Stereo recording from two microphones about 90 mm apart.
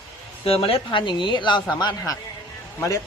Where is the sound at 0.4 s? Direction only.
90° left.